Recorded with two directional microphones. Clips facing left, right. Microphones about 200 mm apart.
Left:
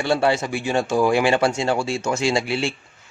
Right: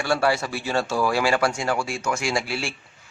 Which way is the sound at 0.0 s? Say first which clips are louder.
Left 3 dB; 20° left (ahead or behind).